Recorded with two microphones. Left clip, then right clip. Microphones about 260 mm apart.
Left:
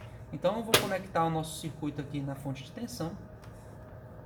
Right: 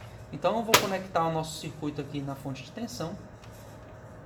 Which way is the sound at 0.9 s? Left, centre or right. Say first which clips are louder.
Right 2 dB; centre.